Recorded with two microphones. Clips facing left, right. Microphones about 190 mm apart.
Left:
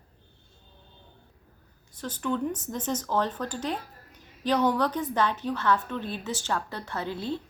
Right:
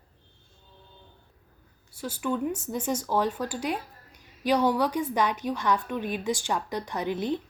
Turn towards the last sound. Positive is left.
turn(degrees=-15)  # may be behind; listen again after turning